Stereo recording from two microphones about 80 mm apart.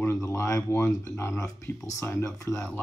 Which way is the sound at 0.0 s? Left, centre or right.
Left.